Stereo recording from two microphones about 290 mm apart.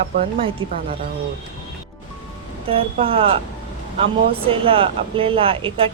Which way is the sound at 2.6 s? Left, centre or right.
Centre.